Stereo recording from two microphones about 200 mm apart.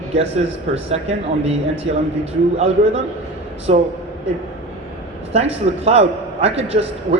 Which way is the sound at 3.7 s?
30° right (ahead or behind).